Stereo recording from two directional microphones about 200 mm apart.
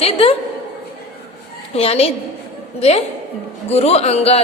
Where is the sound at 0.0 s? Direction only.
30° left (ahead or behind).